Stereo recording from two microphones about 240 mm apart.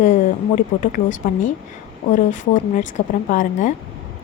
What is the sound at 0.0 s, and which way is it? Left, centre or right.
A woman's voice, left.